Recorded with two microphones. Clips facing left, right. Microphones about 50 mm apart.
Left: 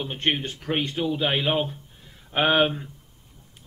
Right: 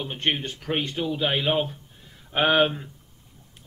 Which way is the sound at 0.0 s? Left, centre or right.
Centre.